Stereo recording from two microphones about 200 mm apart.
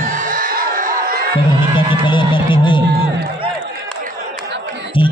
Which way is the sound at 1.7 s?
25° left (ahead or behind).